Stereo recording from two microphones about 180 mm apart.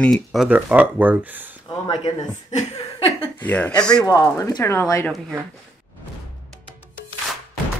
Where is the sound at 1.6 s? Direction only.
25° left (ahead or behind).